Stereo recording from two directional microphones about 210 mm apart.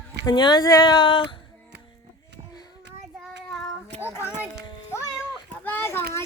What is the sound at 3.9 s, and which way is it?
Child singing, 30° right (ahead or behind).